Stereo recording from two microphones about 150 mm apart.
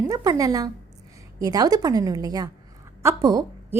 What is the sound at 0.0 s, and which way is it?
A woman's voice, 25° right (ahead or behind).